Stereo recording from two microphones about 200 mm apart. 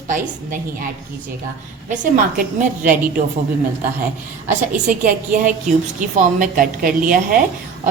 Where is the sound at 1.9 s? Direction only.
40° right (ahead or behind).